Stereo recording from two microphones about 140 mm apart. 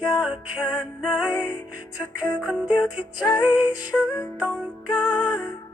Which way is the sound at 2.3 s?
10° right (ahead or behind).